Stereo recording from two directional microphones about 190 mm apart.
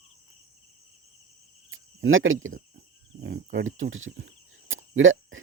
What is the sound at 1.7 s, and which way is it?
Cricket, 90° right.